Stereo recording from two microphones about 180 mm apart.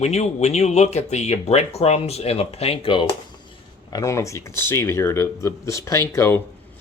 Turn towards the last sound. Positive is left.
turn(degrees=15)  # may be behind; listen again after turning